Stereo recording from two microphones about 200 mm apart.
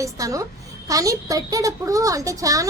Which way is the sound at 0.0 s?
15° right (ahead or behind).